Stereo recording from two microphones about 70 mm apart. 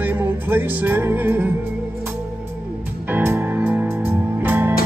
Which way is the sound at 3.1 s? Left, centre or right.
Right.